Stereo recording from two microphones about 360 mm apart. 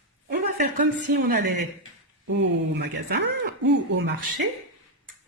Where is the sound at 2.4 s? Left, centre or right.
Right.